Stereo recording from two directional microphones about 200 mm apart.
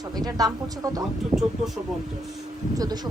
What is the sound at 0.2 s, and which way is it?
Speech, 20° right (ahead or behind).